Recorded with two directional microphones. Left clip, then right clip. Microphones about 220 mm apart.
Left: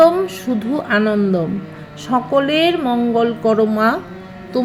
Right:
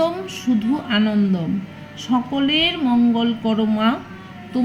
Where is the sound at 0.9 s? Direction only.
20° left (ahead or behind).